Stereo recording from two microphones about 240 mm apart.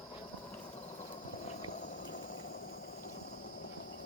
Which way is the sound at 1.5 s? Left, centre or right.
Left.